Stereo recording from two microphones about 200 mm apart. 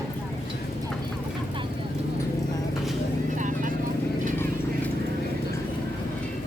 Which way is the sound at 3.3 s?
40° right (ahead or behind).